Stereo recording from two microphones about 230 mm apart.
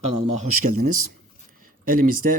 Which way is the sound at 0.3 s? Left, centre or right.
Right.